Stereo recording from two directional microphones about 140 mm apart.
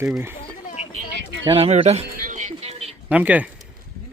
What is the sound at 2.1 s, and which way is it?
Music, 65° right (ahead or behind).